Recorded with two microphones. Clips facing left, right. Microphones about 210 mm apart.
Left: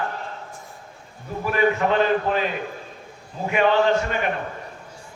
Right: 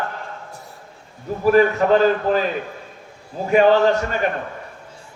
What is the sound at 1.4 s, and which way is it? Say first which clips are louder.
A man's voice: right 6 dB; 40° right (ahead or behind).